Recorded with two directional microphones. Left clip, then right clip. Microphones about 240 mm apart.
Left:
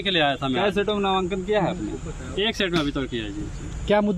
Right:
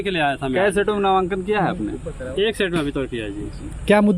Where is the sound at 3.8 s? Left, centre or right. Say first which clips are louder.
Right 5 dB; right.